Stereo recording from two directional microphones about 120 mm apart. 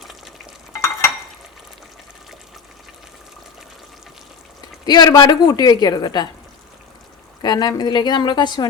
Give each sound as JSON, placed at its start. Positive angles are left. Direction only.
{"t": 0.7, "sound": "stir", "side_deg": 25}
{"t": 4.9, "sound": "a woman's voice", "side_deg": 35}
{"t": 7.4, "sound": "a woman's voice", "side_deg": 35}